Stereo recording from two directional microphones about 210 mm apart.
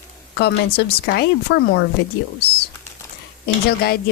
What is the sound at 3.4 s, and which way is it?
Speech, 50° left (ahead or behind).